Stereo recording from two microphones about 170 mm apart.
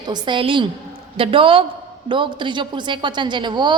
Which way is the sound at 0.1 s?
30° right (ahead or behind).